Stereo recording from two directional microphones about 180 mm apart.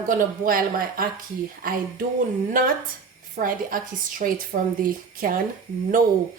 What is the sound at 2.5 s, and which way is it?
A woman's voice, 50° right (ahead or behind).